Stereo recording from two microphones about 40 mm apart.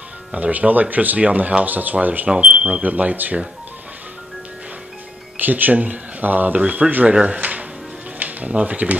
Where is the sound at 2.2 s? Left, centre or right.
Right.